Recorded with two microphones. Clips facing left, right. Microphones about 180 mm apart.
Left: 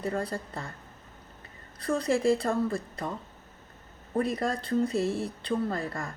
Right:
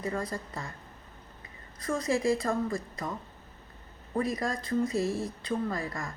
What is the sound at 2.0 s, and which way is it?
Speech, 60° left (ahead or behind).